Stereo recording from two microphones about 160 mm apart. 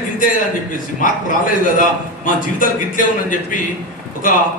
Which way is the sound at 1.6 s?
60° left (ahead or behind).